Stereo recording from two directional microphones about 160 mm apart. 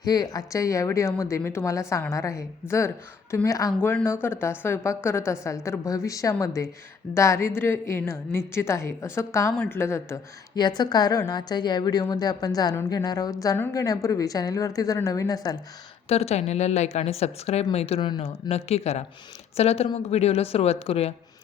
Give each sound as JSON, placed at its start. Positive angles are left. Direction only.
{"t": 0.0, "sound": "a woman's voice", "side_deg": 25}
{"t": 16.0, "sound": "speech", "side_deg": 40}